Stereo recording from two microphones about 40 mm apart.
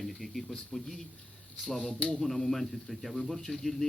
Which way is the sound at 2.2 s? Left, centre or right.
Centre.